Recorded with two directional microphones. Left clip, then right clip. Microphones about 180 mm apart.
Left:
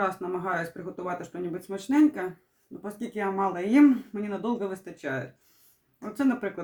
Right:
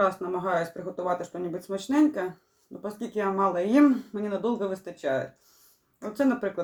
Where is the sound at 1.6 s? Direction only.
15° left (ahead or behind).